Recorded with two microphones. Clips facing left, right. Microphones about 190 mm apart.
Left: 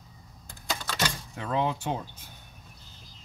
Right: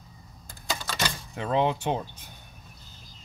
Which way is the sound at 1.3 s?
20° right (ahead or behind).